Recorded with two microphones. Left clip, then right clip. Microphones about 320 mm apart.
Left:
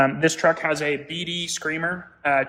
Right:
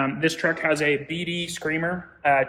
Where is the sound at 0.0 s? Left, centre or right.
Left.